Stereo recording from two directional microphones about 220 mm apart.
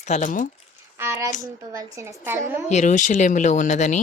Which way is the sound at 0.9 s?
10° right (ahead or behind).